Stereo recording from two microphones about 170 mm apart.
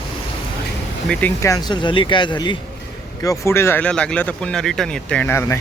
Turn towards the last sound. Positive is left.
turn(degrees=15)  # may be behind; listen again after turning